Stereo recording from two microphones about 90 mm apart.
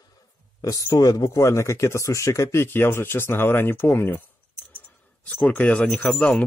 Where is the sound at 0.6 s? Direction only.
40° left (ahead or behind); by 4.2 s 25° left (ahead or behind).